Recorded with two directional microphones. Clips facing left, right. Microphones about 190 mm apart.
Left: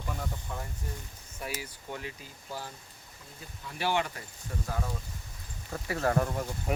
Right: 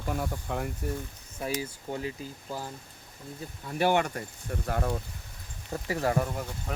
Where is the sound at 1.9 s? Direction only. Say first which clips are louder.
Right 5 dB; 30° right (ahead or behind).